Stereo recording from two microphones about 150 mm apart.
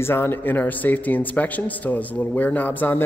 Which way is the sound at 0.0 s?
15° left (ahead or behind).